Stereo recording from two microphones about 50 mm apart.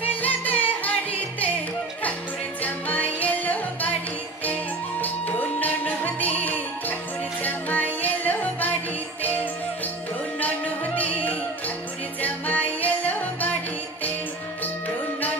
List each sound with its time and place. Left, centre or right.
0.0 s music: left
2.6 s music: left
5.0 s music: left
10.4 s music: left